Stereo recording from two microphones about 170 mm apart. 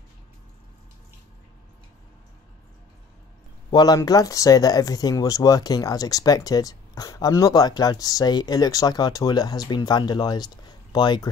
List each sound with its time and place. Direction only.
3.7 s speech: 25° left (ahead or behind)